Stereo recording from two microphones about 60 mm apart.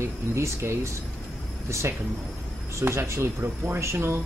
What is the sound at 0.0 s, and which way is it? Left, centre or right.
Speech, right.